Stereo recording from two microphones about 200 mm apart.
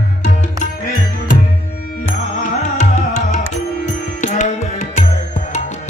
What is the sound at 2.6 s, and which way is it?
Music, 35° left (ahead or behind).